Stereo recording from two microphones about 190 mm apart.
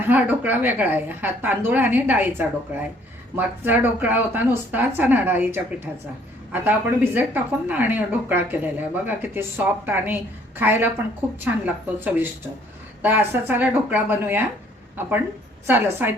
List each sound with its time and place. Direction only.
0.0 s speech: 10° right (ahead or behind)